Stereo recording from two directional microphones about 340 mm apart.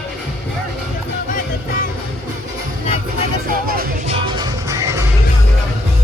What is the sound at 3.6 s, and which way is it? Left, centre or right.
Music, right.